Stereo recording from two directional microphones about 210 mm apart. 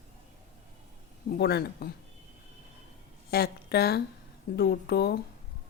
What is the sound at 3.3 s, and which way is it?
A woman's voice, 50° left (ahead or behind).